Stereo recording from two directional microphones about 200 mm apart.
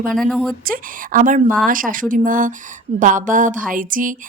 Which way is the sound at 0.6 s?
45° right (ahead or behind).